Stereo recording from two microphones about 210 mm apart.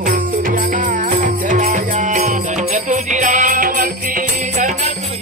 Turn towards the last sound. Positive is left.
turn(degrees=-40)  # may be behind; listen again after turning